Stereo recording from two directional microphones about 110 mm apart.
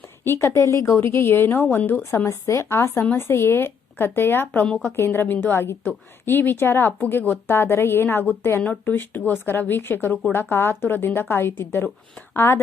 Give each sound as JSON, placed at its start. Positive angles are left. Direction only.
{"t": 0.3, "sound": "a woman's voice", "side_deg": 25}
{"t": 4.6, "sound": "a woman's voice", "side_deg": 10}
{"t": 4.9, "sound": "a woman's voice", "side_deg": 20}